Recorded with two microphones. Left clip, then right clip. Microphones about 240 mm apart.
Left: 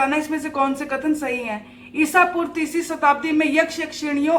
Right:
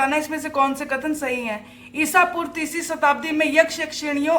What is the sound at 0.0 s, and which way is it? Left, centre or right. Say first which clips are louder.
Speech: even; right.